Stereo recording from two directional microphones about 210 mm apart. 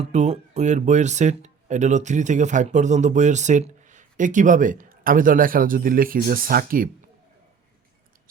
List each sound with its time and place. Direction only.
0.0 s speech: 35° right (ahead or behind)